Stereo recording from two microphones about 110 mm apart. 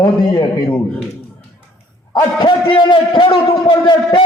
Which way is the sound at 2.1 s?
45° left (ahead or behind).